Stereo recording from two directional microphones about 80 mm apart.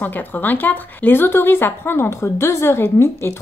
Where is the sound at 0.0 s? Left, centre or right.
Left.